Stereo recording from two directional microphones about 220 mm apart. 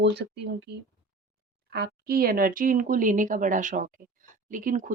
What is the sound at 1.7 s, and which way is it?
Speech, 45° right (ahead or behind).